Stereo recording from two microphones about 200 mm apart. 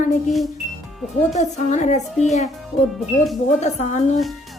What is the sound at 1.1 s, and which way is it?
Speech, 35° left (ahead or behind).